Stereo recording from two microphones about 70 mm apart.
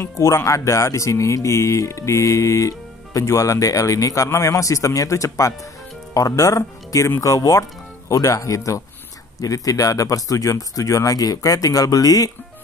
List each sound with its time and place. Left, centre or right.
0.2 s speech: left